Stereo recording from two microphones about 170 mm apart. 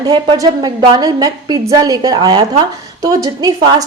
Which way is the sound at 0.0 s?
25° right (ahead or behind).